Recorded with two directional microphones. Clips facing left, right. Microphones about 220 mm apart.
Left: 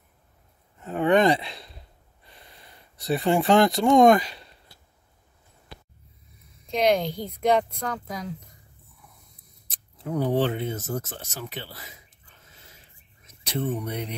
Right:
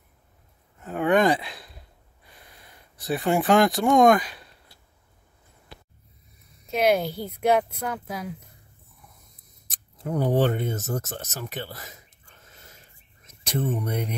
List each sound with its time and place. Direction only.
0.8 s speech: centre (ahead or behind)
6.7 s speech: 5° right (ahead or behind)
9.7 s speech: 45° right (ahead or behind)
13.5 s speech: 50° right (ahead or behind)